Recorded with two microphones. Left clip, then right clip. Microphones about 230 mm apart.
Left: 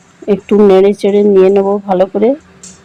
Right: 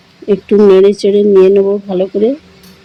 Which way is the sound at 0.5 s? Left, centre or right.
Left.